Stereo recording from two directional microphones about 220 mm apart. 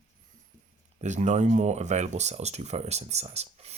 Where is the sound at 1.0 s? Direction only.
30° right (ahead or behind).